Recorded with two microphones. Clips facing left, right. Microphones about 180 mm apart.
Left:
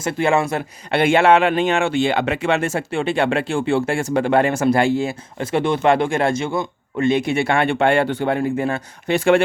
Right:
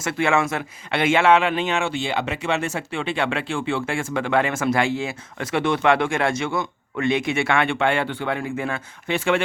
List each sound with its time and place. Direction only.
0.2 s speech: 35° left (ahead or behind)
0.9 s speech: 50° left (ahead or behind)
6.5 s speech: 25° left (ahead or behind)
7.1 s speech: 40° left (ahead or behind)